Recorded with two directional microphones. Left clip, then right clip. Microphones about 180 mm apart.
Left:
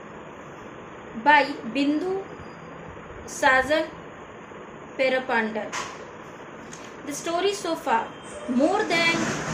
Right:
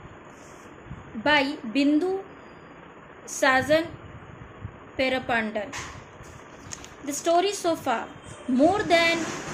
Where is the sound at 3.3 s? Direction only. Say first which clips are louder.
Left 1 dB; 50° right (ahead or behind).